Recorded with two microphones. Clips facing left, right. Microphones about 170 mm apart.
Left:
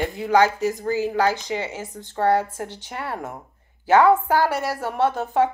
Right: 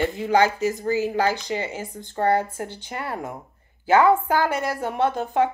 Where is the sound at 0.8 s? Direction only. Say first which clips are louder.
Left 1 dB; 10° right (ahead or behind).